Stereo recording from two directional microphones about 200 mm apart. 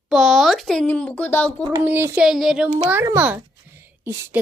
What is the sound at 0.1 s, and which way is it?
A woman's voice, centre (ahead or behind).